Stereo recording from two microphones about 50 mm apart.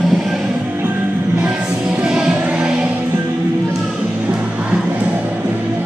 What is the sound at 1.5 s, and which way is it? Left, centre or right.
Music, centre.